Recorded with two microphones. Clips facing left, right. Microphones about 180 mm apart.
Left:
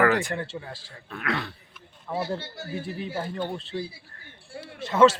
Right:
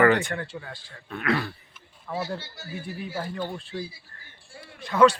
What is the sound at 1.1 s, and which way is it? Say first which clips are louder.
Speech: right 4 dB; centre (ahead or behind).